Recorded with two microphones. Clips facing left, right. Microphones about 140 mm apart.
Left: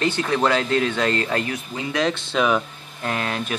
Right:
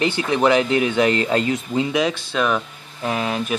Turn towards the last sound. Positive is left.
turn(degrees=-10)  # may be behind; listen again after turning